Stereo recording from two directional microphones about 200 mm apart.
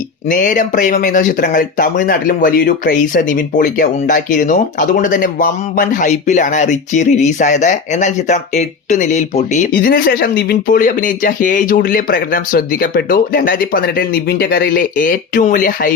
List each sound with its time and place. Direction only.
0.3 s speech: 40° left (ahead or behind)
9.7 s speech: 45° left (ahead or behind)